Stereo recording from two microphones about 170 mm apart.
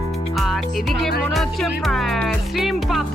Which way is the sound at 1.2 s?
Centre (ahead or behind).